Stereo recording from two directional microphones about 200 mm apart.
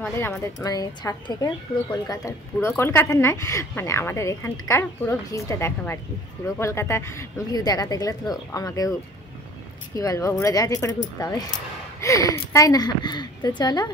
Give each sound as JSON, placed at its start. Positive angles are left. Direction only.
{"t": 0.0, "sound": "a woman's voice", "side_deg": 10}
{"t": 9.9, "sound": "a woman's voice", "side_deg": 15}